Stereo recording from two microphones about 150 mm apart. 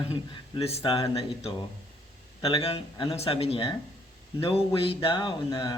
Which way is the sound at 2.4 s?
40° left (ahead or behind).